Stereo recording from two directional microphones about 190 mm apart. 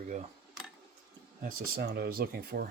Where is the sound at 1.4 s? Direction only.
50° right (ahead or behind).